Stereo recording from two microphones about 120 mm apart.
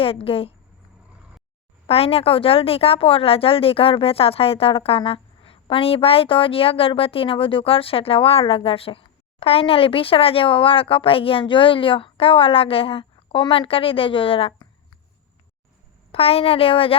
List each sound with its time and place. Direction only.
0.0 s a woman's voice: 50° left (ahead or behind)
1.9 s a woman's voice: 55° left (ahead or behind)
16.1 s a woman's voice: 55° left (ahead or behind)